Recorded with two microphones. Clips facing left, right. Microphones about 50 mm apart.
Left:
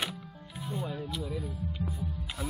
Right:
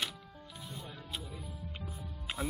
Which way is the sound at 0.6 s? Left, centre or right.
Left.